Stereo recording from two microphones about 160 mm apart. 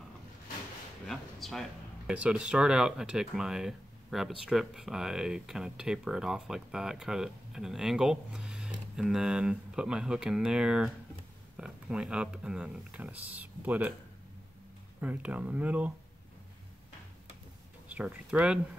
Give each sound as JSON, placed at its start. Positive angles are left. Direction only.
{"t": 1.0, "sound": "a sound", "side_deg": 0}
{"t": 2.1, "sound": "speech", "side_deg": -5}
{"t": 15.0, "sound": "speech", "side_deg": -10}
{"t": 17.8, "sound": "speech", "side_deg": -10}